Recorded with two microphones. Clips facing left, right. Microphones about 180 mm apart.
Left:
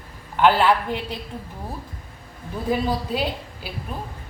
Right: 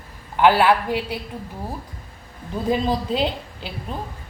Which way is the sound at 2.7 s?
25° right (ahead or behind).